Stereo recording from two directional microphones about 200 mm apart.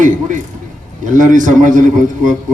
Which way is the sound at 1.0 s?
40° right (ahead or behind).